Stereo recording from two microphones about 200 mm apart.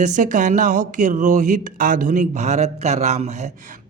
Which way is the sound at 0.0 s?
40° right (ahead or behind).